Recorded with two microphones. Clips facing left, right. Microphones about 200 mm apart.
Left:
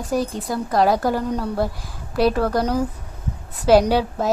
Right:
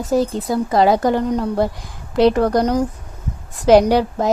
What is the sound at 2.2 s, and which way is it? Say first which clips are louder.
A woman's voice: right 5 dB; 20° right (ahead or behind).